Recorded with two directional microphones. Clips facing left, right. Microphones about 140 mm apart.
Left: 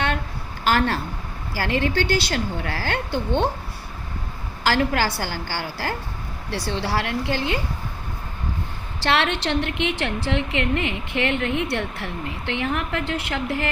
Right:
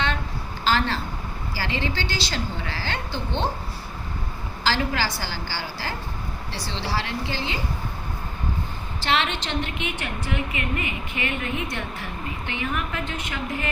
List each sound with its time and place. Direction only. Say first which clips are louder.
0.6 s a sound: left 3 dB; 55° left (ahead or behind)
1.5 s a woman's voice: left 6 dB; 55° left (ahead or behind)
4.6 s a woman's voice: left 4 dB; 55° left (ahead or behind)
9.0 s a woman's voice: left 3 dB; 70° left (ahead or behind)